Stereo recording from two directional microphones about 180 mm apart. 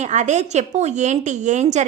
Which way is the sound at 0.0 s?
40° right (ahead or behind).